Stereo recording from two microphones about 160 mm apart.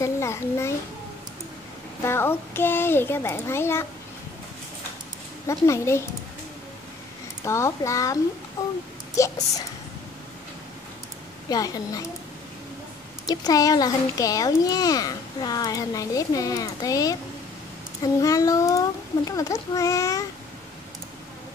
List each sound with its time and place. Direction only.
0.0 s a sound: 15° left (ahead or behind)
2.0 s a child's voice: 15° left (ahead or behind)
5.5 s a child's voice: 20° left (ahead or behind)
7.4 s a child's voice: 15° left (ahead or behind)
11.4 s a child's voice: 25° left (ahead or behind)
13.3 s a child's voice: 25° left (ahead or behind)